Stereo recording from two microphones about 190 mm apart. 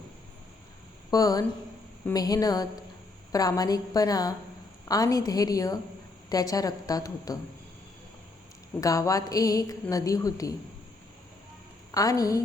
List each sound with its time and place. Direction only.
1.1 s a woman's voice: 20° left (ahead or behind)
8.8 s a woman's voice: 15° left (ahead or behind)
11.9 s a woman's voice: 20° left (ahead or behind)